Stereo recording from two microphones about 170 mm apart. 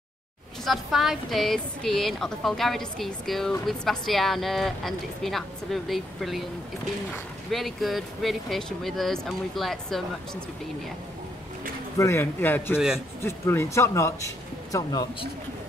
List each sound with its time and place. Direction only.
0.7 s a woman's voice: centre (ahead or behind)
7.5 s a woman's voice: centre (ahead or behind)
12.0 s speech: 15° left (ahead or behind)
12.7 s a woman's voice: 5° right (ahead or behind)
13.2 s speech: 15° left (ahead or behind)